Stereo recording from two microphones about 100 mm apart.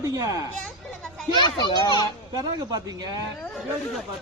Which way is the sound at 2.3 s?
40° right (ahead or behind).